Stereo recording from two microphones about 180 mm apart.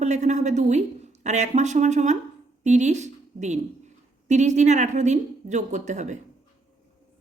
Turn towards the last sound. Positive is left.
turn(degrees=-40)  # may be behind; listen again after turning